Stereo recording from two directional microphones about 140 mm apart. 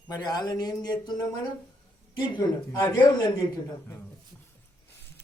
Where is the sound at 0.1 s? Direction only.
30° left (ahead or behind).